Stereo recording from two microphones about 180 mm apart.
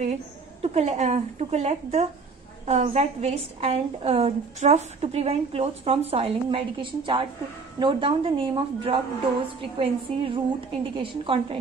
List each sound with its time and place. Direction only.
0.0 s a woman's voice: 40° right (ahead or behind)